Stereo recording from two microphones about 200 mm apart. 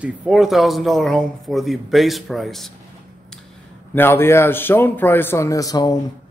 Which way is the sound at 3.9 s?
10° left (ahead or behind).